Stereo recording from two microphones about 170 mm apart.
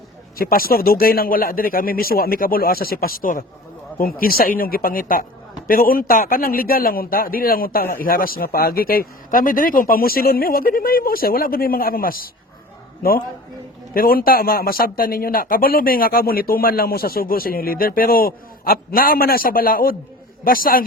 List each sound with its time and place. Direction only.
0.3 s a man's voice: 60° left (ahead or behind)